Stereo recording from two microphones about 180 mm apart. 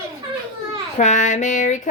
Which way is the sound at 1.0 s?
40° left (ahead or behind).